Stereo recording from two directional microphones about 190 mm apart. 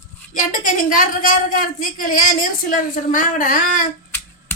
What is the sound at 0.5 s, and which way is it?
Speech, 45° left (ahead or behind).